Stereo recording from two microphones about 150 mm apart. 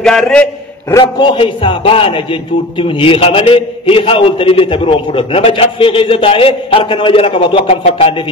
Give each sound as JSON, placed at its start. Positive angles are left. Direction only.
{"t": 0.0, "sound": "a man's voice", "side_deg": 0}
{"t": 1.0, "sound": "a man's voice", "side_deg": 35}